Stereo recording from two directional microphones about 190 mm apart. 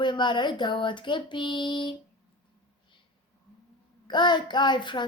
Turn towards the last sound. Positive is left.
turn(degrees=25)  # may be behind; listen again after turning